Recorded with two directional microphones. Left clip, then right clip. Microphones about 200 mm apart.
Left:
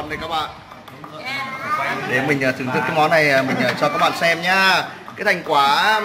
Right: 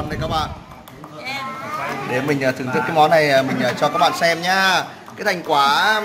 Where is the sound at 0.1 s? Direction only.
10° right (ahead or behind).